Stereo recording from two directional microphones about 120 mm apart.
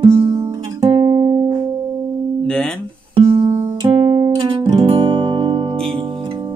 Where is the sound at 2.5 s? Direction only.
5° left (ahead or behind).